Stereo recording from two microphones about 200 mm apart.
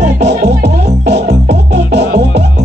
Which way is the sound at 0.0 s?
35° right (ahead or behind).